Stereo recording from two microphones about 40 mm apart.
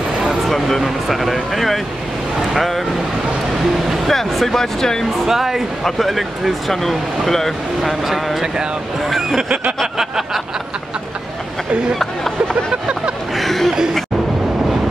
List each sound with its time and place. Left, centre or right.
0.5 s speech: centre
4.1 s speech: centre
5.2 s speech: centre
9.3 s snicker: right
9.9 s a sound: centre
13.3 s a sound: centre